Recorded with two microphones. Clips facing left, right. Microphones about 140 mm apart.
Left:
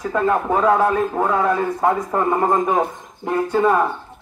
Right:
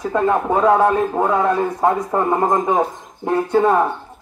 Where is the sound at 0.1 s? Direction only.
20° right (ahead or behind).